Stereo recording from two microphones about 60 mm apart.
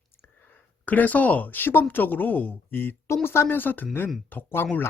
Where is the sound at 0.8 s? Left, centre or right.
Left.